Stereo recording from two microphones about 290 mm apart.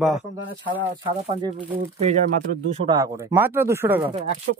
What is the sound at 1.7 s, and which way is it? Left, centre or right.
Speech, right.